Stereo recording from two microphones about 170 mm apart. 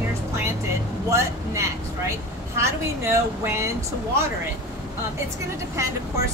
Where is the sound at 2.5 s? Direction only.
15° right (ahead or behind).